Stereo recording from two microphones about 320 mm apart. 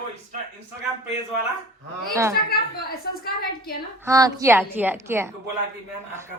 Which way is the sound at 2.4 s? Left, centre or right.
Left.